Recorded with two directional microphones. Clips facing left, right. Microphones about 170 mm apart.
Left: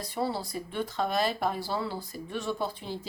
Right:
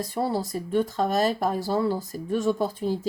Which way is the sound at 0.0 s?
45° right (ahead or behind).